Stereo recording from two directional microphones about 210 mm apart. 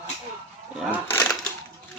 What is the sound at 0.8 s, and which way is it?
Speech, 10° left (ahead or behind).